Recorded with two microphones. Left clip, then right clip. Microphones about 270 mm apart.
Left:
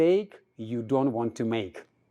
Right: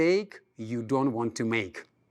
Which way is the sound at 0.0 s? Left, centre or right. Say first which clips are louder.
Left 2 dB; right.